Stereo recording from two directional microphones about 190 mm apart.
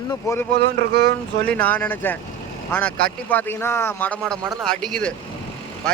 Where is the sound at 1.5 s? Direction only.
10° left (ahead or behind).